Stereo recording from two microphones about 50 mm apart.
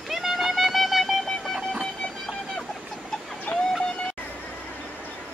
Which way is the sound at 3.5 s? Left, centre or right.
Left.